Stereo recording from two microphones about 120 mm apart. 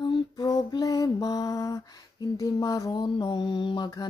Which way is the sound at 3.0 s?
40° left (ahead or behind).